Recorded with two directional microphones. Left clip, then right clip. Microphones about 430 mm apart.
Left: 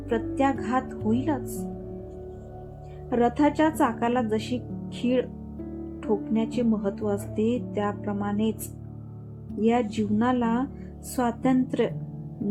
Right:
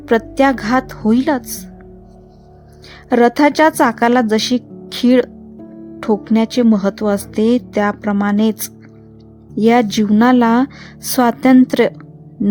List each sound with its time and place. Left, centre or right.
0.1 s speech: right
3.1 s speech: right
6.0 s speech: right
9.6 s speech: right